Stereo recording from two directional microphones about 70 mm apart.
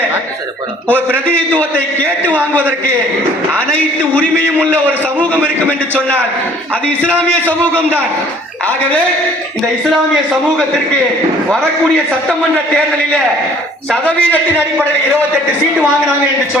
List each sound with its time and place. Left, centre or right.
0.9 s a man's voice: right
5.4 s a man's voice: right
6.8 s a man's voice: left
12.3 s a man's voice: centre
13.9 s a man's voice: left